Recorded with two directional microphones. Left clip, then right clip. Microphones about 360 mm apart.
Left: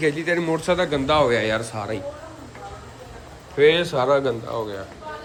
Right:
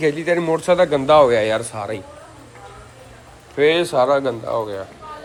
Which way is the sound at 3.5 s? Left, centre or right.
Centre.